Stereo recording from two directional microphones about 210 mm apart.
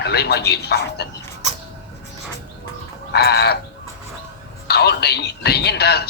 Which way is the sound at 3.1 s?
50° left (ahead or behind).